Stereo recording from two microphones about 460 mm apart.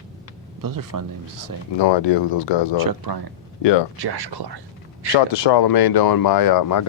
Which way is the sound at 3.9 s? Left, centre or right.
Right.